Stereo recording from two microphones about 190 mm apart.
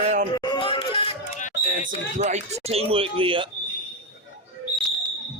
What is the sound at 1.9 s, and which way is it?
Speech, 40° right (ahead or behind).